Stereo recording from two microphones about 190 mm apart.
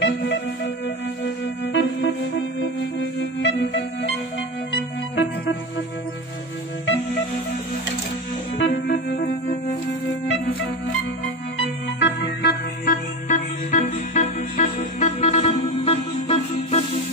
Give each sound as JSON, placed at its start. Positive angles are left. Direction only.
{"t": 0.0, "sound": "music", "side_deg": 70}
{"t": 1.6, "sound": "music", "side_deg": 70}
{"t": 3.4, "sound": "music", "side_deg": 70}
{"t": 8.5, "sound": "music", "side_deg": 60}
{"t": 12.0, "sound": "music", "side_deg": 65}
{"t": 12.8, "sound": "music", "side_deg": 45}